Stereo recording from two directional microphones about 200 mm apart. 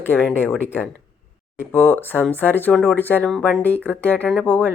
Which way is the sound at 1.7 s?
10° left (ahead or behind).